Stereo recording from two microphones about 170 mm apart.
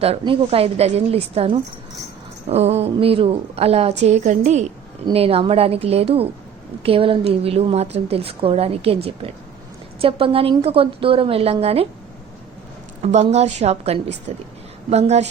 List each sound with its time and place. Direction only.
0.0 s a woman's voice: 35° right (ahead or behind)
13.0 s a woman's voice: 40° right (ahead or behind)